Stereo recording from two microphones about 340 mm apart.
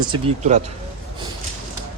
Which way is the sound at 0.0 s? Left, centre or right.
Centre.